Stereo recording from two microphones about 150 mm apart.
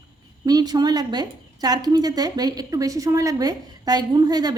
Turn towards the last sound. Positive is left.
turn(degrees=-25)  # may be behind; listen again after turning